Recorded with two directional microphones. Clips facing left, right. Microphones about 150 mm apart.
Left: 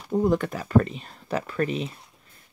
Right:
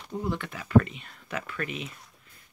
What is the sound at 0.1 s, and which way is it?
Speech, 45° left (ahead or behind).